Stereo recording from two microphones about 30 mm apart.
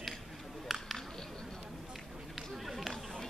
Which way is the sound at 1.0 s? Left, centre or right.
Centre.